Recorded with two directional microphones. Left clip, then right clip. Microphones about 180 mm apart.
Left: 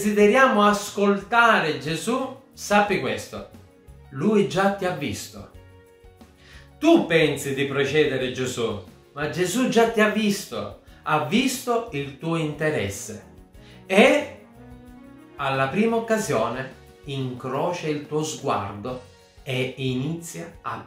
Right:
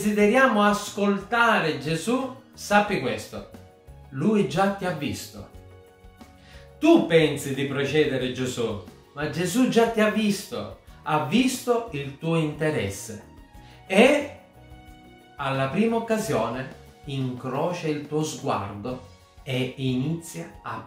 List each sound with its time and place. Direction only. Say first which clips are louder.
0.0 s speech: left 3 dB; 15° left (ahead or behind)
6.8 s speech: even; 15° left (ahead or behind)
15.3 s speech: left 3 dB; 15° left (ahead or behind)